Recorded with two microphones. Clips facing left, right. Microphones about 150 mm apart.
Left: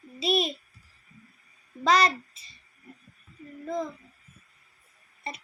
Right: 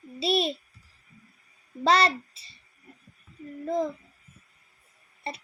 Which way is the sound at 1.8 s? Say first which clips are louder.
Even; 30° right (ahead or behind).